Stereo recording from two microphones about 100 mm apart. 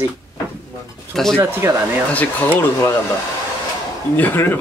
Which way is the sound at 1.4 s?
25° right (ahead or behind).